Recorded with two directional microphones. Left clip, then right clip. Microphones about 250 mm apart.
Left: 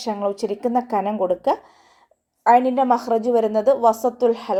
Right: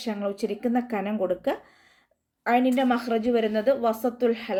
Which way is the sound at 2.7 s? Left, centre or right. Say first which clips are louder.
Left 6 dB; left.